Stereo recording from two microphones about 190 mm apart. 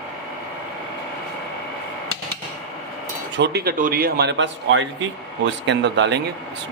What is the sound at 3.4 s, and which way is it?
A man's voice, 55° right (ahead or behind).